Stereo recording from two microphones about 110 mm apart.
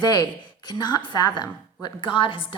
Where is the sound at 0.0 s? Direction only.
40° left (ahead or behind).